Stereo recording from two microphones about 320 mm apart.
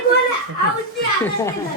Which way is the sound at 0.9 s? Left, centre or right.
Centre.